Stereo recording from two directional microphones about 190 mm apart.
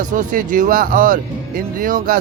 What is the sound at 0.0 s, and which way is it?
Speech, 40° right (ahead or behind).